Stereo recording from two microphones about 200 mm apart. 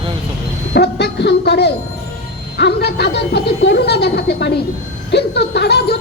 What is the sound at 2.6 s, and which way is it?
Speech, 55° left (ahead or behind).